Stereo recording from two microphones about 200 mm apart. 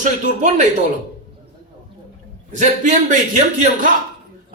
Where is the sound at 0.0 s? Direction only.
35° right (ahead or behind).